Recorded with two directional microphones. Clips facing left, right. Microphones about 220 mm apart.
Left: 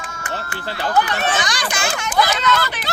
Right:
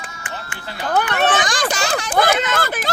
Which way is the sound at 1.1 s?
55° right (ahead or behind).